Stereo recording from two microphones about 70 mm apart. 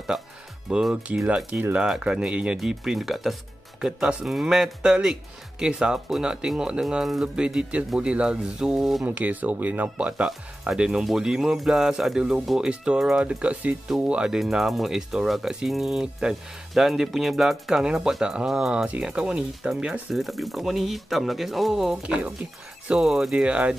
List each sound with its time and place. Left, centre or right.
0.1 s speech: centre
0.7 s speech: centre
9.0 s speech: right
13.8 s speech: centre
20.2 s speech: centre
22.0 s speech: centre
22.9 s speech: centre